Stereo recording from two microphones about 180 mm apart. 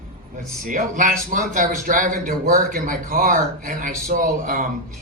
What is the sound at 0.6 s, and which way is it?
A man's voice, 50° right (ahead or behind).